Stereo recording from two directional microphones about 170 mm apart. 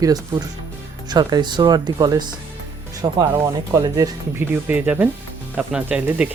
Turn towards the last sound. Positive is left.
turn(degrees=-10)  # may be behind; listen again after turning